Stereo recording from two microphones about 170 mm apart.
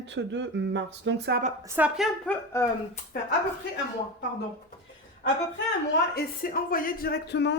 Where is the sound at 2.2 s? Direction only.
15° left (ahead or behind).